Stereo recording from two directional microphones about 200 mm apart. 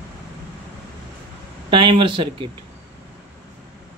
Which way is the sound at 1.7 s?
25° right (ahead or behind).